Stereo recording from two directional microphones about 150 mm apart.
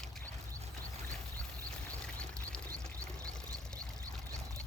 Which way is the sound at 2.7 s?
20° right (ahead or behind).